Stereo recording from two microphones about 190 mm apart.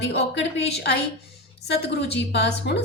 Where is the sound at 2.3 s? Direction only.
65° left (ahead or behind).